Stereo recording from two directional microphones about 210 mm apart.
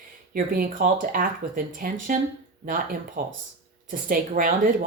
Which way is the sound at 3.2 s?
40° right (ahead or behind).